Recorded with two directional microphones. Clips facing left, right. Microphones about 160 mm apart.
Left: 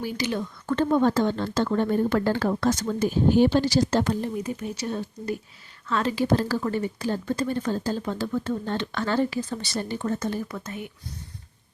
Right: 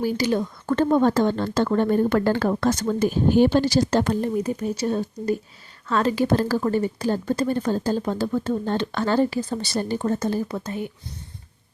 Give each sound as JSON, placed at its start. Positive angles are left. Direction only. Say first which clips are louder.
{"t": 0.0, "sound": "speech", "louder": "right 6 dB", "side_deg": -40}